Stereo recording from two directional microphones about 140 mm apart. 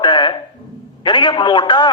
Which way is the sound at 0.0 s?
35° left (ahead or behind).